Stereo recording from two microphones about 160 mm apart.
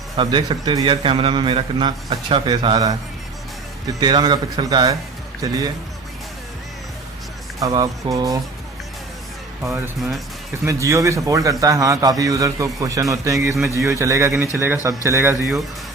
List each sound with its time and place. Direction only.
0.2 s a man's voice: 30° right (ahead or behind)
4.0 s a man's voice: 30° right (ahead or behind)
7.6 s a man's voice: 25° right (ahead or behind)
9.6 s a man's voice: 15° right (ahead or behind)